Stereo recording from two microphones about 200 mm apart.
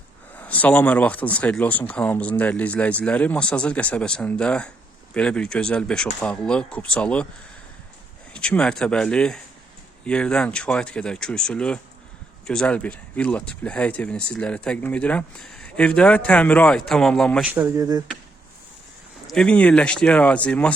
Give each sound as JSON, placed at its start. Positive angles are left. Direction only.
{"t": 0.3, "sound": "speech", "side_deg": 10}
{"t": 8.3, "sound": "speech", "side_deg": 5}
{"t": 17.5, "sound": "speech", "side_deg": -15}
{"t": 19.3, "sound": "speech", "side_deg": 5}